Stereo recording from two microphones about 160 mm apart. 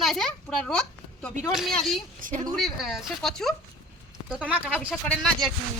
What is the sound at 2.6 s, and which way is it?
Speech, centre (ahead or behind).